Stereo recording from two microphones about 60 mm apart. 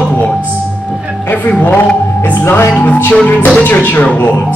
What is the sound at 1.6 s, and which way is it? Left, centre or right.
Music, left.